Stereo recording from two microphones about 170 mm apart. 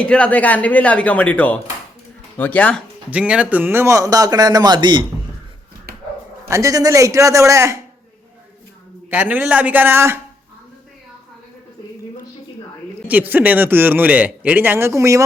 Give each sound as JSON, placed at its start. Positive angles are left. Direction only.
{"t": 0.0, "sound": "speech", "side_deg": 5}
{"t": 3.1, "sound": "a man's voice", "side_deg": -5}
{"t": 6.5, "sound": "speech", "side_deg": -20}
{"t": 9.0, "sound": "speech", "side_deg": -10}
{"t": 13.1, "sound": "speech", "side_deg": -10}